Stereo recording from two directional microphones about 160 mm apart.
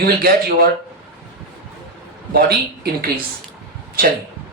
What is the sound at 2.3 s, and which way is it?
Speech, 75° right (ahead or behind).